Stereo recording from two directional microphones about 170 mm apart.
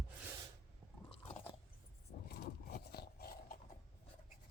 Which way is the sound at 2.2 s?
70° left (ahead or behind).